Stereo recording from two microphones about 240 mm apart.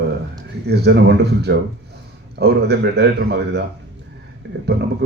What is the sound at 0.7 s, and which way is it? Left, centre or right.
Speech, right.